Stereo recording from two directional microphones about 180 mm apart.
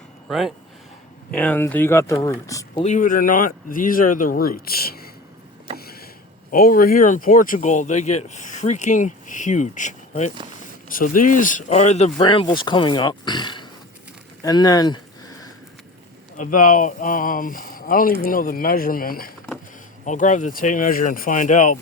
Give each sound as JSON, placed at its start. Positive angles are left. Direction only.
{"t": 0.3, "sound": "speech", "side_deg": 0}
{"t": 2.8, "sound": "speech", "side_deg": 45}
{"t": 5.7, "sound": "a sound", "side_deg": 60}
{"t": 6.5, "sound": "speech", "side_deg": 50}
{"t": 12.1, "sound": "speech", "side_deg": 25}
{"t": 14.4, "sound": "a sound", "side_deg": 20}
{"t": 16.4, "sound": "speech", "side_deg": 45}
{"t": 20.1, "sound": "speech", "side_deg": 45}